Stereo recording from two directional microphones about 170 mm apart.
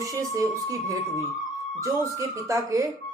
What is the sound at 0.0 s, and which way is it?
Speech, 20° right (ahead or behind).